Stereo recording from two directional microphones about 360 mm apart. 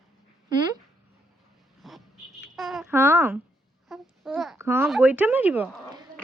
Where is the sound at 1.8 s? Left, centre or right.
Centre.